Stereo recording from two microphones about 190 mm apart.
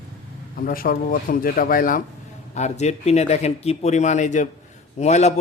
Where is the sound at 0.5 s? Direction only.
50° left (ahead or behind).